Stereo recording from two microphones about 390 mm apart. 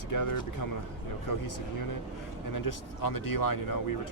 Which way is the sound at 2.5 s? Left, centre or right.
Left.